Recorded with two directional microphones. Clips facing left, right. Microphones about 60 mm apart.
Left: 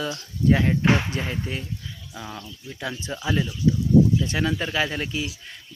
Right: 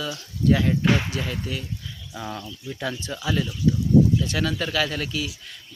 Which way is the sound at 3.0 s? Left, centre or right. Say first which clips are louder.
Left 2 dB; left.